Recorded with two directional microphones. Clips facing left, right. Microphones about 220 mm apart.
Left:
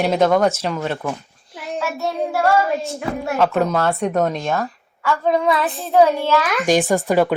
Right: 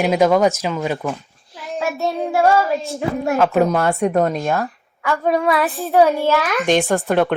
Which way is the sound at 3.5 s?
15° right (ahead or behind).